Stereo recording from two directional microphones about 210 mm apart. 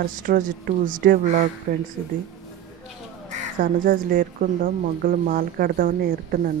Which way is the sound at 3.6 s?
40° right (ahead or behind).